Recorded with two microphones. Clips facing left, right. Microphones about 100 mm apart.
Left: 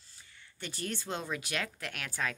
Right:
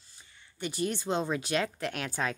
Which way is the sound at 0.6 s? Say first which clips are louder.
Right 7 dB; 15° right (ahead or behind).